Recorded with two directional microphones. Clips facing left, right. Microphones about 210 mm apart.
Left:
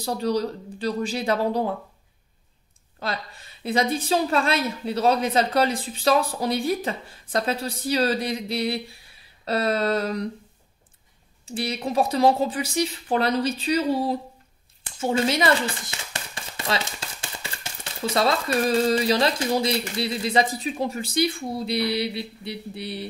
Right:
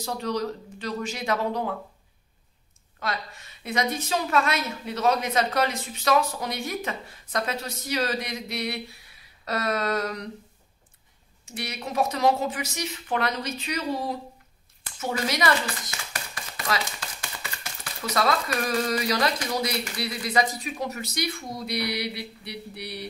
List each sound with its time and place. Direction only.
0.0 s a woman's voice: 35° left (ahead or behind)
3.0 s a woman's voice: 30° left (ahead or behind)
9.4 s a sound: 30° left (ahead or behind)
11.4 s a woman's voice: 30° left (ahead or behind)